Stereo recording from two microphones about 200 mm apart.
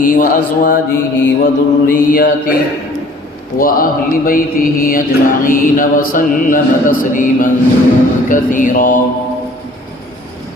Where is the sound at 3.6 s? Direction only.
45° left (ahead or behind).